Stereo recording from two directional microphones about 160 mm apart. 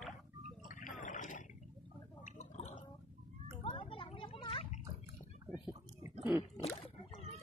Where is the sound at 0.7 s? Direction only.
55° left (ahead or behind).